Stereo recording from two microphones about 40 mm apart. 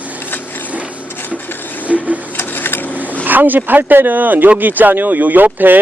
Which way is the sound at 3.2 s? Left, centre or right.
Right.